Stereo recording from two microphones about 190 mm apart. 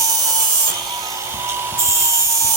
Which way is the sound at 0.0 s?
20° right (ahead or behind).